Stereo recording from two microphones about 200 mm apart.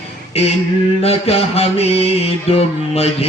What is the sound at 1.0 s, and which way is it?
Mantra, 30° left (ahead or behind).